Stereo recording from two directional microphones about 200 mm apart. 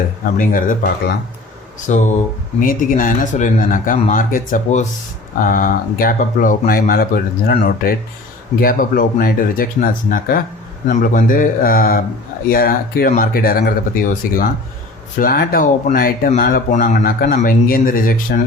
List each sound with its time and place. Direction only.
0.3 s speech: 45° left (ahead or behind)
1.9 s a man's voice: 40° left (ahead or behind)